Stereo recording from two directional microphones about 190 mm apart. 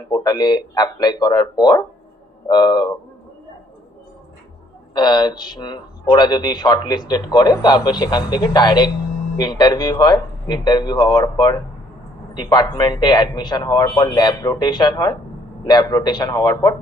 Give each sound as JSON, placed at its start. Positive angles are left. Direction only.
{"t": 0.1, "sound": "a man's voice", "side_deg": 20}
{"t": 4.9, "sound": "a man's voice", "side_deg": 20}